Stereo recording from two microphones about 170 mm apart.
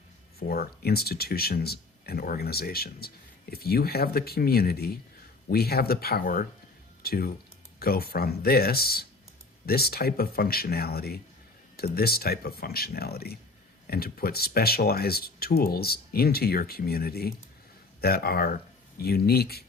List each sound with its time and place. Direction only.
0.3 s speech: 65° left (ahead or behind)